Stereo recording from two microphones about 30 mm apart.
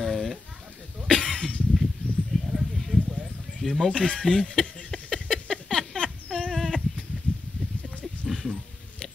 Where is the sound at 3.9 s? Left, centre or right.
Left.